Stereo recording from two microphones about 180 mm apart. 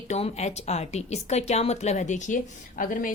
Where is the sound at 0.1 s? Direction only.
35° left (ahead or behind).